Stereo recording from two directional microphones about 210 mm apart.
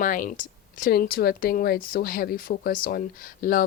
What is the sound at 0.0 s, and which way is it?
Speech, 40° left (ahead or behind).